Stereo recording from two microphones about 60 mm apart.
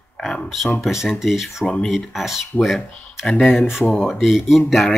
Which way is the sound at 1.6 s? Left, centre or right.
Centre.